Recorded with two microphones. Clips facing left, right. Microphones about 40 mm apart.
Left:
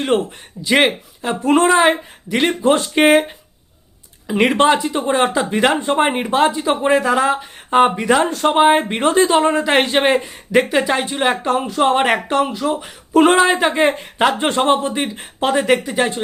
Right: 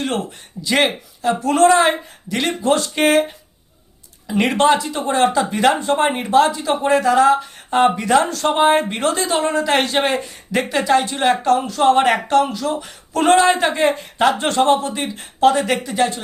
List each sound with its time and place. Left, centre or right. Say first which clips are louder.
0.6 s speech: left 3 dB; centre
4.3 s speech: left 1 dB; centre